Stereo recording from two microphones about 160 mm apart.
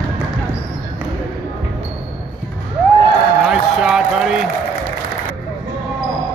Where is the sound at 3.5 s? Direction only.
5° right (ahead or behind).